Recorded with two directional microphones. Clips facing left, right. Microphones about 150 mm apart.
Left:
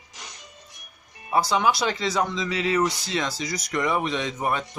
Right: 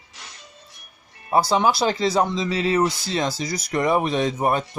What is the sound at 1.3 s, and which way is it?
Speech, 35° right (ahead or behind).